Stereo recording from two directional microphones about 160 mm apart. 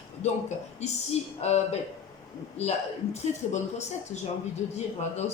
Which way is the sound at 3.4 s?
45° left (ahead or behind).